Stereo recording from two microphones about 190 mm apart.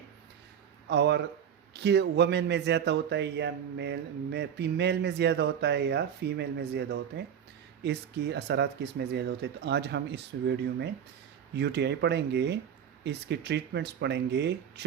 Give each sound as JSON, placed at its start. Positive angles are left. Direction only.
{"t": 0.9, "sound": "speech", "side_deg": -65}